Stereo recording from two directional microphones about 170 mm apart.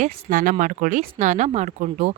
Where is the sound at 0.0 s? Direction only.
50° right (ahead or behind).